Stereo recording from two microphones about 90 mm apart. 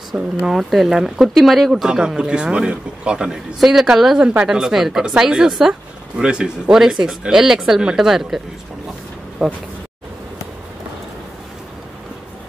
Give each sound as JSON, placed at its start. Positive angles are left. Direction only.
{"t": 0.1, "sound": "speech", "side_deg": -5}
{"t": 9.4, "sound": "speech", "side_deg": 5}